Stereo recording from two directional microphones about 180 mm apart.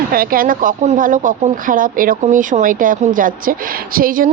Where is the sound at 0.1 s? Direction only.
55° right (ahead or behind).